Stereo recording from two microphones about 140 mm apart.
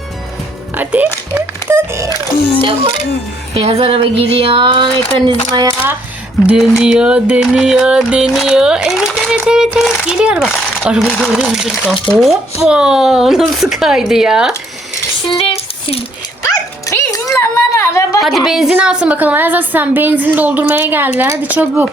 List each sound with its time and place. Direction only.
0.8 s a woman's voice: 10° right (ahead or behind)
2.6 s speech: 40° right (ahead or behind)
6.5 s music: 5° right (ahead or behind)
15.3 s a sound: 40° left (ahead or behind)
16.8 s music: 25° left (ahead or behind)
18.2 s a woman's voice: centre (ahead or behind)